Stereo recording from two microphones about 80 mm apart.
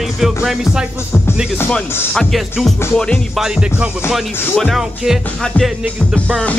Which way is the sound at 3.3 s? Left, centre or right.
Centre.